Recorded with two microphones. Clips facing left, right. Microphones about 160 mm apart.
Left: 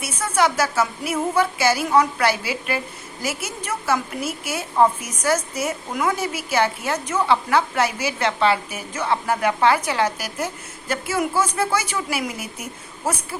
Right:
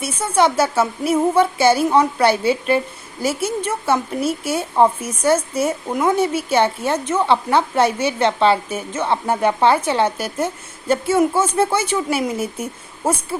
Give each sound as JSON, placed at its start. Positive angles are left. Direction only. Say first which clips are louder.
{"t": 0.0, "sound": "a woman's voice", "louder": "right 4 dB", "side_deg": -30}